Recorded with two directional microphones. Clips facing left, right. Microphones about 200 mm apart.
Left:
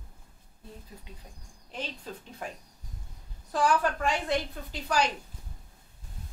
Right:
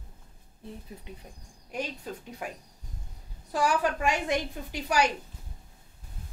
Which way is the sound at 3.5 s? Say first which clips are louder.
Even; 10° right (ahead or behind).